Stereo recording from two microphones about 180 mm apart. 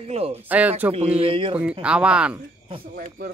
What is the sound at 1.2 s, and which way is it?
Speech, 30° right (ahead or behind).